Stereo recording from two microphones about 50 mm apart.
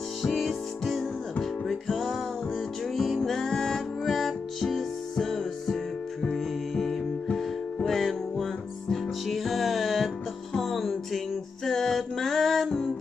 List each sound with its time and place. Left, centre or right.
0.2 s music: centre